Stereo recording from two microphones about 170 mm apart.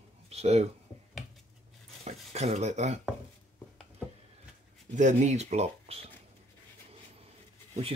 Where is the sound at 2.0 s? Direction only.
40° right (ahead or behind).